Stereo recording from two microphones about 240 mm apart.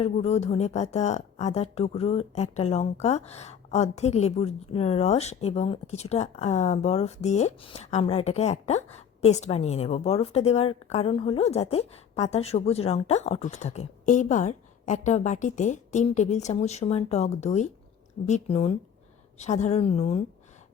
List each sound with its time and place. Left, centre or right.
0.0 s a woman's voice: left